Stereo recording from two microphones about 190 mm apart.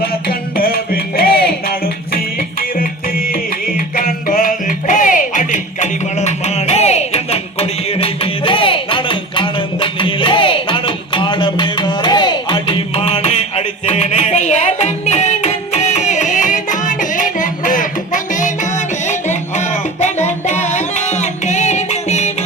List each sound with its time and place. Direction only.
0.0 s music: 50° left (ahead or behind); by 22.3 s 35° left (ahead or behind)